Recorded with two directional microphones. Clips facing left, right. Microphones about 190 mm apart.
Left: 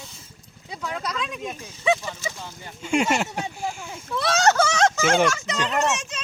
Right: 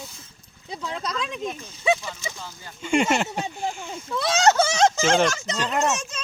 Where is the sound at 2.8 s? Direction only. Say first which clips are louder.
Right 1 dB; 5° left (ahead or behind).